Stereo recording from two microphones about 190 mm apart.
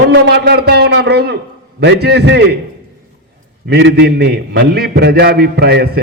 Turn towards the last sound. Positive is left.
turn(degrees=-60)  # may be behind; listen again after turning